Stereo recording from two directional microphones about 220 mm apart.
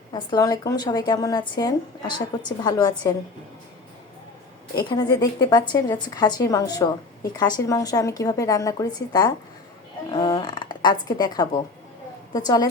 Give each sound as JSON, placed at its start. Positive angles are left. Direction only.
{"t": 0.1, "sound": "a woman's voice", "side_deg": 20}
{"t": 4.8, "sound": "a woman's voice", "side_deg": 20}